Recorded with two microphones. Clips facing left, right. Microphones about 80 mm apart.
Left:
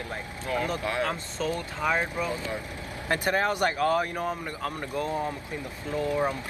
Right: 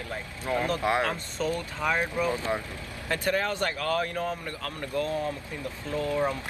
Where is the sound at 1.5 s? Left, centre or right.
Centre.